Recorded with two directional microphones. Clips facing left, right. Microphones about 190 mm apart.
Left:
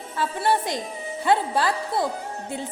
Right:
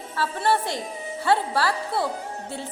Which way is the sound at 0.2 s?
15° left (ahead or behind).